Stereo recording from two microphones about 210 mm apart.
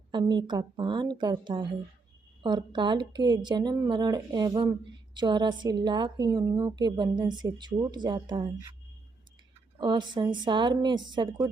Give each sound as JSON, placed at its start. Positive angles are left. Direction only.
{"t": 0.1, "sound": "a woman's voice", "side_deg": -20}
{"t": 9.7, "sound": "a woman's voice", "side_deg": -20}